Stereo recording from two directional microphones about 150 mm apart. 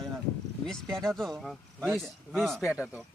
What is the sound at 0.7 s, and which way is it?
Speech, 5° left (ahead or behind).